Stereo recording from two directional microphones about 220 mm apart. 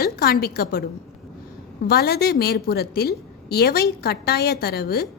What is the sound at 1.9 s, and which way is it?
A woman's voice, 45° left (ahead or behind).